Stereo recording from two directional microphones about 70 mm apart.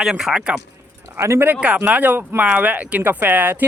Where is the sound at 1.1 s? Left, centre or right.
Right.